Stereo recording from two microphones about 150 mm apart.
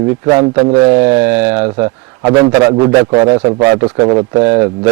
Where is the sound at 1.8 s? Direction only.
30° right (ahead or behind).